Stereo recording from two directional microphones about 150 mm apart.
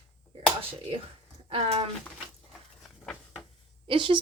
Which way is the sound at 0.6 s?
40° right (ahead or behind).